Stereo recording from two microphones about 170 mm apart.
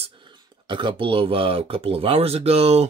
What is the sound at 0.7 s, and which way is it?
Speech, 30° right (ahead or behind).